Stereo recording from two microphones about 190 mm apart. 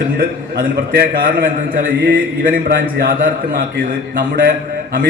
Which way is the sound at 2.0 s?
55° right (ahead or behind).